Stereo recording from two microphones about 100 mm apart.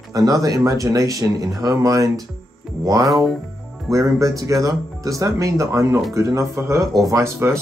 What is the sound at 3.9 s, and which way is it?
Speech, 35° right (ahead or behind).